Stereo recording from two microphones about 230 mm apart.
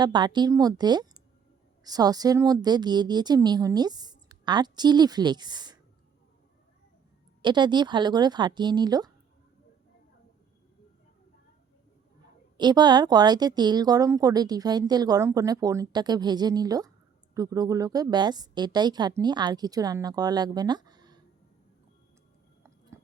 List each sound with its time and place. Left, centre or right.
0.0 s speech: centre
7.4 s speech: centre
12.5 s speech: centre